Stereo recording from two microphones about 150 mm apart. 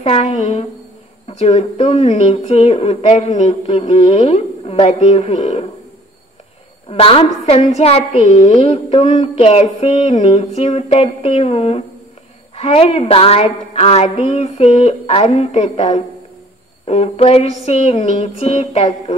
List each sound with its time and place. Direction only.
0.0 s speech: 45° left (ahead or behind)
6.9 s speech: 40° left (ahead or behind)